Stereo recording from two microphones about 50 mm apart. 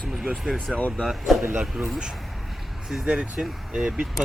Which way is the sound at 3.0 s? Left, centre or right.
Centre.